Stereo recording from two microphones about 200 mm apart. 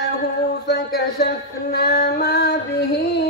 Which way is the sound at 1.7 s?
55° left (ahead or behind).